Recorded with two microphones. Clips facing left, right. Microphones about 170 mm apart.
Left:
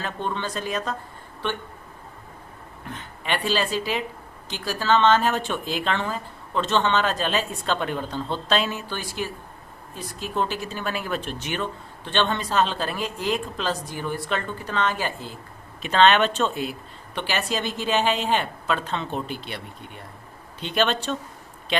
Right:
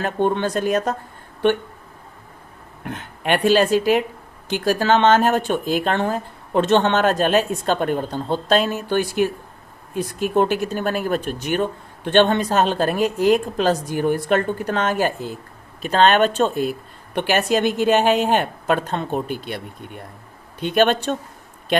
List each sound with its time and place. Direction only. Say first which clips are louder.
0.0 s speech: right 9 dB; 55° right (ahead or behind)
2.8 s speech: right 8 dB; 60° right (ahead or behind)